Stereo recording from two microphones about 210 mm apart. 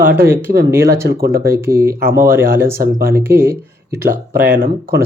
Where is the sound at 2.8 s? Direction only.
45° right (ahead or behind).